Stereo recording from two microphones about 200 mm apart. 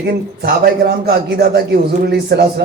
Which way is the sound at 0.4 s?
50° right (ahead or behind).